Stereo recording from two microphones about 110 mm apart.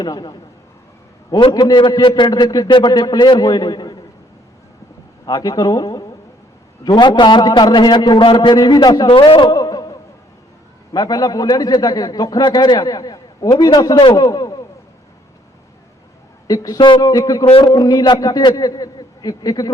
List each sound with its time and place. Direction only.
0.0 s a man's voice: 40° left (ahead or behind)
5.2 s a man's voice: 40° left (ahead or behind)
8.4 s a man's voice: 35° left (ahead or behind)
9.0 s a man's voice: 50° left (ahead or behind)
9.5 s a sound: 35° left (ahead or behind)
10.9 s a man's voice: 35° left (ahead or behind)
16.5 s a man's voice: 35° left (ahead or behind)